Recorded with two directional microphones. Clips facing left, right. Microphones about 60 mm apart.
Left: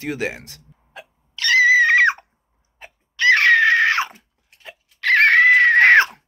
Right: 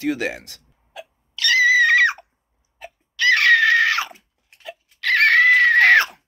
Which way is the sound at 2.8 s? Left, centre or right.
Left.